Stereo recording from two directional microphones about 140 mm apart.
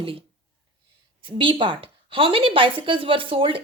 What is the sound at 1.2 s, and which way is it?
A woman's voice, 40° right (ahead or behind).